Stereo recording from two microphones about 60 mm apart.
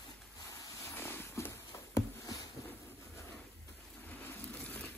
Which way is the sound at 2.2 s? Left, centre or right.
Left.